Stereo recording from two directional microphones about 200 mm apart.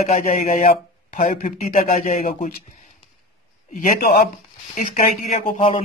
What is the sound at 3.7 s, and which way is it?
Speech, 45° left (ahead or behind).